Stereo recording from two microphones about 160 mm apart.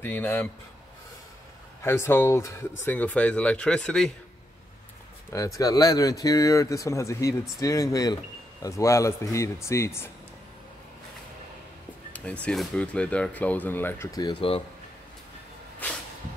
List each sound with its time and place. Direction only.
0.0 s speech: 15° left (ahead or behind)
1.8 s speech: 15° left (ahead or behind)
5.3 s speech: 20° left (ahead or behind)
12.1 s speech: 10° left (ahead or behind); by 14.6 s 30° left (ahead or behind)
15.8 s a sound: 10° left (ahead or behind)